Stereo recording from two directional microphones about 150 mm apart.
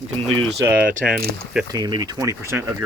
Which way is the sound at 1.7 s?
30° right (ahead or behind).